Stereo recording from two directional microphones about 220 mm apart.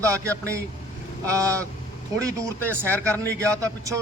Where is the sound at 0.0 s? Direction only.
15° right (ahead or behind).